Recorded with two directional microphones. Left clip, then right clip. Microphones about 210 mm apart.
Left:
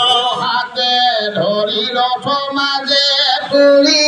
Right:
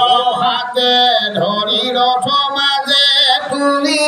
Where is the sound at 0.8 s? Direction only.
10° right (ahead or behind).